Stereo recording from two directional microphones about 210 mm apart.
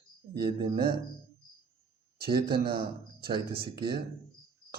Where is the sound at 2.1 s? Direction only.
45° right (ahead or behind).